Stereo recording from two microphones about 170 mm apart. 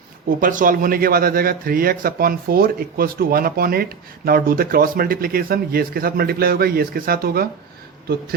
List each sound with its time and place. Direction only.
0.3 s a man's voice: 55° right (ahead or behind)